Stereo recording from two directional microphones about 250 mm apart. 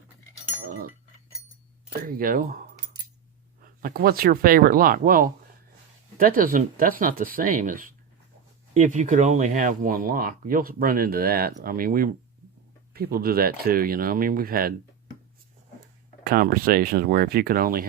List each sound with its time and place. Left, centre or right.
2.0 s speech: right
16.2 s speech: right